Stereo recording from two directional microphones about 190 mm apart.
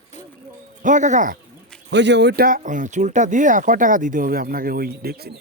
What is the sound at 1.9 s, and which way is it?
Speech, 65° right (ahead or behind).